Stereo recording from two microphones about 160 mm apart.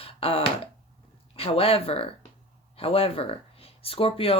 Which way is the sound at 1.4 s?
35° left (ahead or behind).